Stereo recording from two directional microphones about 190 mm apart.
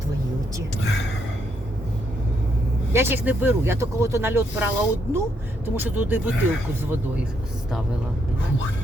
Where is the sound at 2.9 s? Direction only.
10° right (ahead or behind).